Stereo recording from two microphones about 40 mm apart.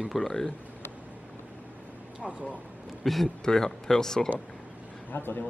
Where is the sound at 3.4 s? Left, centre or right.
Centre.